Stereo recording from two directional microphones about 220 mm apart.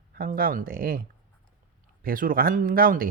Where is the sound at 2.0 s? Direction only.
40° right (ahead or behind).